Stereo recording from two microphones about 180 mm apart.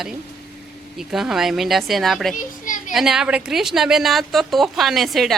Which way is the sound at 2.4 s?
45° left (ahead or behind).